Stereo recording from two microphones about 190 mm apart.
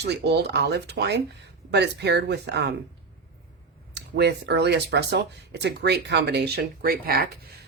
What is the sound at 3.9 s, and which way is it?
Speech, 60° right (ahead or behind).